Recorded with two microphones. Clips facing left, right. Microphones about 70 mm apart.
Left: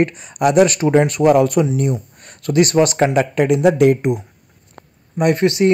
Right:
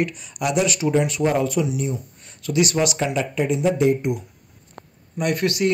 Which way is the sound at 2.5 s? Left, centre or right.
Left.